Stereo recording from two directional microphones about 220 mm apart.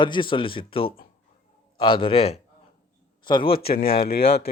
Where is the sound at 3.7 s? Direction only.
45° left (ahead or behind).